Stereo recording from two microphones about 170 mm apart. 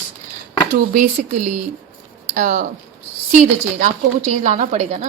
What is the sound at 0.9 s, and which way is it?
A woman's voice, 50° right (ahead or behind).